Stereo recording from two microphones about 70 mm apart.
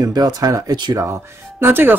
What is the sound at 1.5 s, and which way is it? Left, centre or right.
Speech, right.